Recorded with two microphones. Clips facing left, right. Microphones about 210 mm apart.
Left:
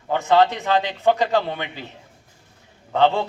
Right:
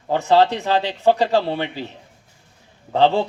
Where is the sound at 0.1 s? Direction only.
35° right (ahead or behind).